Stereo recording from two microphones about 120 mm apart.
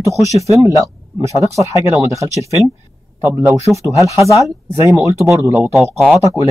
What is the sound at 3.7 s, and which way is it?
Speech, 25° right (ahead or behind).